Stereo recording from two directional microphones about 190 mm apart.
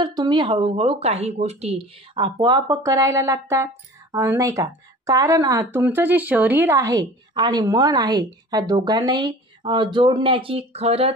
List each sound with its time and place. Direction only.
0.0 s speech: 25° right (ahead or behind)